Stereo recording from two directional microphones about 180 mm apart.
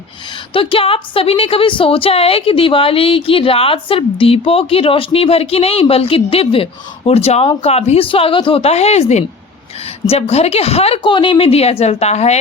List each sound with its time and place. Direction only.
0.5 s a woman's voice: 30° left (ahead or behind)